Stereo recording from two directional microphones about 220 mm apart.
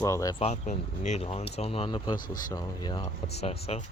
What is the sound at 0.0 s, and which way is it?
Speech, 15° left (ahead or behind).